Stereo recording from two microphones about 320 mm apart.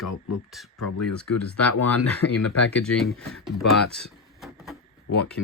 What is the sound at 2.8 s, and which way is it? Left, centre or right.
Speech, centre.